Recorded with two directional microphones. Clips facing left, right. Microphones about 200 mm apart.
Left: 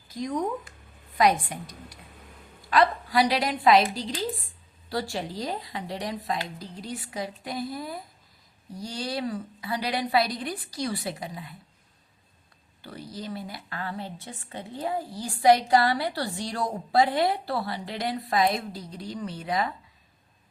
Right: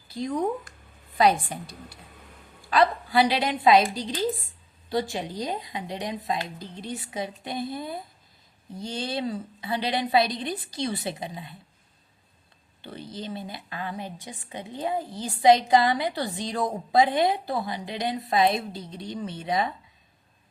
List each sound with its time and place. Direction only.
0.1 s speech: 30° right (ahead or behind)
3.1 s a woman's voice: 25° right (ahead or behind)
12.8 s a woman's voice: 25° right (ahead or behind)